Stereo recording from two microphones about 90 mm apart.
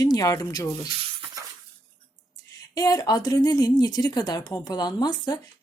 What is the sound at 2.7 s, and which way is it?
A woman's voice, 45° left (ahead or behind).